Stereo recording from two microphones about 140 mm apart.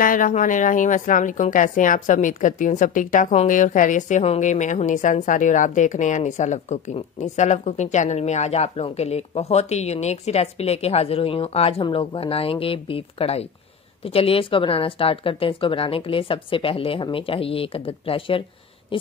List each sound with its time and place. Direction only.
0.0 s a woman's voice: 70° left (ahead or behind); by 18.4 s 40° left (ahead or behind)